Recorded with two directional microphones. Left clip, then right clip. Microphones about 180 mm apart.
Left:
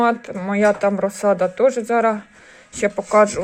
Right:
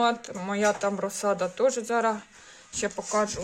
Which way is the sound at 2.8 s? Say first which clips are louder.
Left 12 dB; 20° left (ahead or behind).